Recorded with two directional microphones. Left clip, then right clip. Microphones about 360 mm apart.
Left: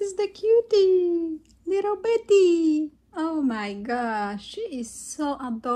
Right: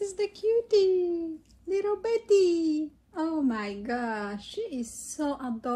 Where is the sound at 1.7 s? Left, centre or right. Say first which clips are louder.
Left 4 dB; left.